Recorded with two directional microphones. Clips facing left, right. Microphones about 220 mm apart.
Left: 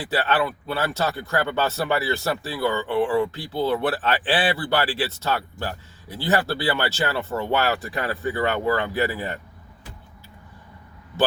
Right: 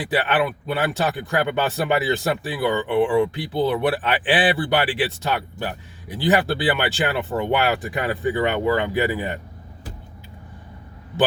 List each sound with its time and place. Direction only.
0.0 s speech: 15° right (ahead or behind)